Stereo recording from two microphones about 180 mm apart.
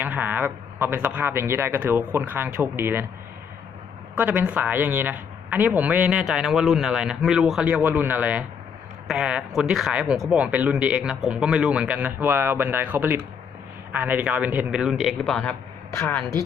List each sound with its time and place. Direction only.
0.0 s speech: 10° right (ahead or behind)
4.1 s speech: 10° right (ahead or behind); by 16.2 s 15° left (ahead or behind)